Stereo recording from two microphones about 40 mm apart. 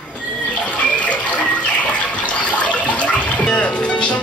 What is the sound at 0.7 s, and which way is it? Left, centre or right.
Water, left.